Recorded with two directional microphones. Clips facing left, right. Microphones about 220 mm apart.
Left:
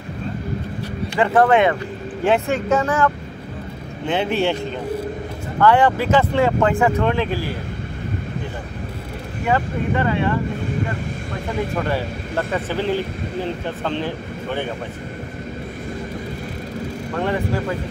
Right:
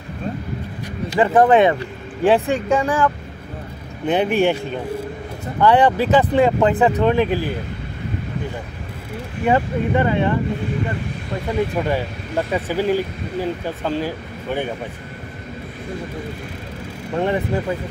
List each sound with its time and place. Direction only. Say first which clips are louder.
1.2 s speech: right 2 dB; 20° right (ahead or behind)
4.1 s speech: right 3 dB; 15° right (ahead or behind)
5.6 s speech: right 1 dB; 15° right (ahead or behind)
9.5 s speech: right 3 dB; 20° right (ahead or behind)
11.9 s speech: right 1 dB; 15° right (ahead or behind)
17.1 s speech: right 3 dB; 20° right (ahead or behind)